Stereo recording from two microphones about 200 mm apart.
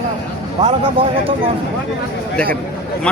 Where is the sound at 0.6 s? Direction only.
35° right (ahead or behind).